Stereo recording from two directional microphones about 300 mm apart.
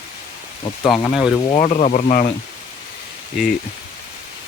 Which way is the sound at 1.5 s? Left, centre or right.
Left.